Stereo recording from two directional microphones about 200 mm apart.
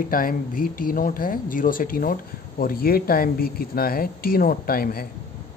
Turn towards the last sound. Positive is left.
turn(degrees=50)  # may be behind; listen again after turning